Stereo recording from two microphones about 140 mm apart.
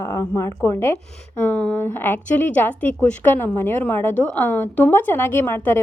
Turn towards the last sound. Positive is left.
turn(degrees=15)  # may be behind; listen again after turning